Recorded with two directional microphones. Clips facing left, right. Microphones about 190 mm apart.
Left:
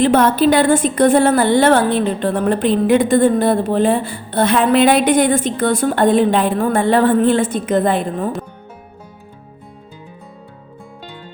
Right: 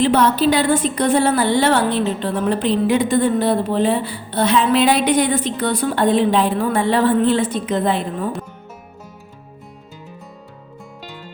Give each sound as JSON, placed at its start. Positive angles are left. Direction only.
{"t": 0.0, "sound": "a woman's voice", "side_deg": 50}